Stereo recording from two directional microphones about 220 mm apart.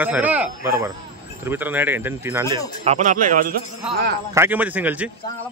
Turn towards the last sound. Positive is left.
turn(degrees=-5)  # may be behind; listen again after turning